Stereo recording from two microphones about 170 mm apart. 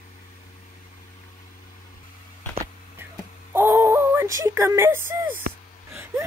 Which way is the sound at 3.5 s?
15° right (ahead or behind).